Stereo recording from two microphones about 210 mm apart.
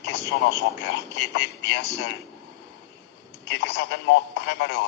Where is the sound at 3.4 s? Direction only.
55° left (ahead or behind).